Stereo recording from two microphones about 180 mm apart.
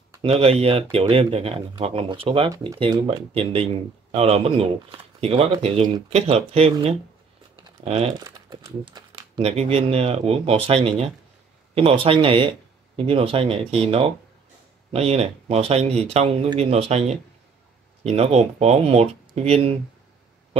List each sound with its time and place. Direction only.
0.2 s speech: 30° right (ahead or behind)
2.5 s speech: 20° right (ahead or behind)
7.6 s crumpling: 35° right (ahead or behind)
8.2 s speech: 20° right (ahead or behind)
18.0 s speech: 35° right (ahead or behind)